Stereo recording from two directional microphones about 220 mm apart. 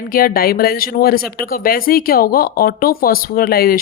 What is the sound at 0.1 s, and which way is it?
Speech, 40° left (ahead or behind).